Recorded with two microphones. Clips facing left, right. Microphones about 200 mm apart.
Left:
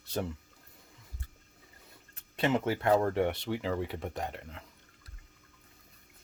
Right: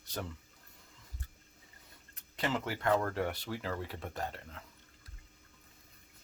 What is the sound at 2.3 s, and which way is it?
Speech, 25° left (ahead or behind).